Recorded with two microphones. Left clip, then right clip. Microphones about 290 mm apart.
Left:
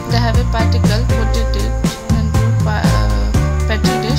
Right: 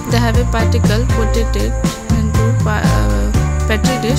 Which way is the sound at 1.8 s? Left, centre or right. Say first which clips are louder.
Right 1 dB; centre.